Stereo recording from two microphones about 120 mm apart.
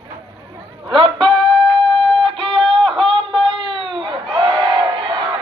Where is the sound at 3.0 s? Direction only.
45° right (ahead or behind).